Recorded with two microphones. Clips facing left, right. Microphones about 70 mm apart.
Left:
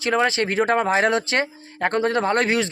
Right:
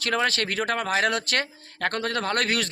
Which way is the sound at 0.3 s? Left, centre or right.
Left.